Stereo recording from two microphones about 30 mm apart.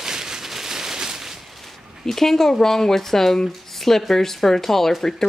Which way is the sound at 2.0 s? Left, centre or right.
Centre.